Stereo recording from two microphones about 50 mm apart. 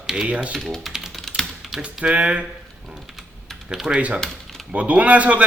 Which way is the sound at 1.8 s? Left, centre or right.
Centre.